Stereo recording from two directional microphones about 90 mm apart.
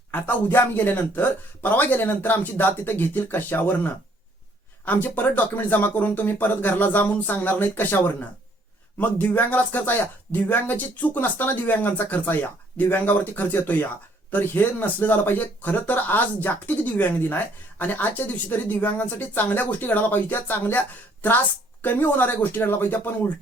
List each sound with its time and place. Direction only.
0.1 s speech: 20° left (ahead or behind)
4.9 s speech: 20° left (ahead or behind)